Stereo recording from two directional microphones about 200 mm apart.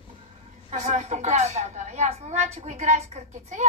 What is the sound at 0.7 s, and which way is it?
A woman's voice, 35° right (ahead or behind).